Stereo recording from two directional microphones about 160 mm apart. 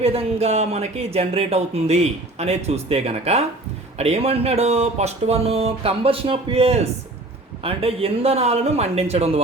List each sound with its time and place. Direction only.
0.0 s speech: 40° right (ahead or behind)